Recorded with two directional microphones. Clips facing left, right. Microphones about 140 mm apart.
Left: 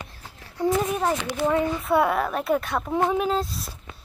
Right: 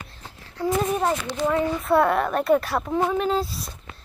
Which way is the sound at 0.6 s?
15° left (ahead or behind).